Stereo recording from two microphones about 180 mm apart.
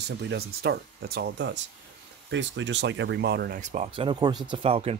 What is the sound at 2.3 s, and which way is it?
Speech, 90° right.